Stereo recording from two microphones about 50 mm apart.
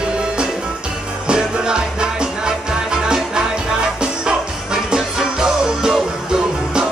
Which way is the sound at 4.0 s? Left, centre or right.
Centre.